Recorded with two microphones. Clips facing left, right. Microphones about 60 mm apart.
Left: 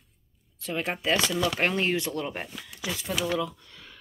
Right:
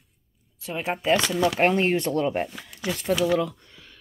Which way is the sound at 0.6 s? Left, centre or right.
Centre.